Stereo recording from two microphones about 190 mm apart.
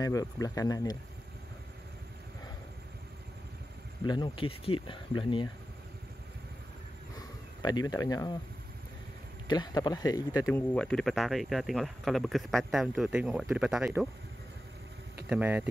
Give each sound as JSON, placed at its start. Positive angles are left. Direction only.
{"t": 0.0, "sound": "speech", "side_deg": 20}
{"t": 4.0, "sound": "speech", "side_deg": 25}
{"t": 7.6, "sound": "speech", "side_deg": 20}
{"t": 9.5, "sound": "speech", "side_deg": 20}
{"t": 10.5, "sound": "speech", "side_deg": 5}
{"t": 15.2, "sound": "speech", "side_deg": -5}